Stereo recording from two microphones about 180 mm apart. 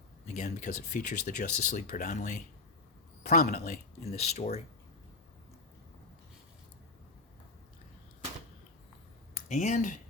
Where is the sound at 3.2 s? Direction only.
55° left (ahead or behind).